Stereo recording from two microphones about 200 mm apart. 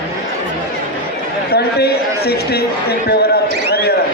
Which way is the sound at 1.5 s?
50° left (ahead or behind).